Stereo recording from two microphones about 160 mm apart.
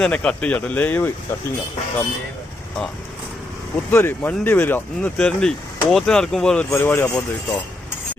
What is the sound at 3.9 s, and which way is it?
Speech, 15° left (ahead or behind).